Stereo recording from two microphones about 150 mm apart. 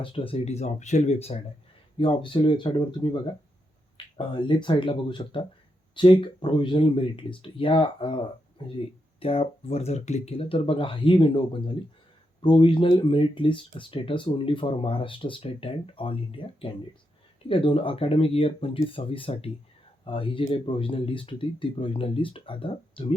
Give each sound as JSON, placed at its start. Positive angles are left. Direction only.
{"t": 0.0, "sound": "speech", "side_deg": 35}
{"t": 2.0, "sound": "speech", "side_deg": 35}